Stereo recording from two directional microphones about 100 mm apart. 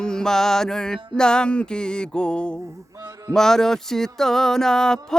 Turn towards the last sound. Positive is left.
turn(degrees=5)  # may be behind; listen again after turning